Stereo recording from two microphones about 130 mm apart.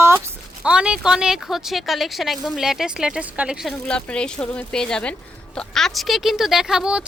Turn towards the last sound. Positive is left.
turn(degrees=-5)  # may be behind; listen again after turning